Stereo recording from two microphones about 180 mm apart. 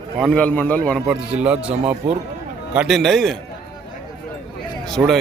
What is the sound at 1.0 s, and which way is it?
A man's voice, 5° right (ahead or behind).